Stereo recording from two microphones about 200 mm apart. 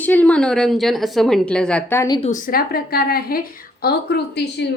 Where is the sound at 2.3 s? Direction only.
45° left (ahead or behind).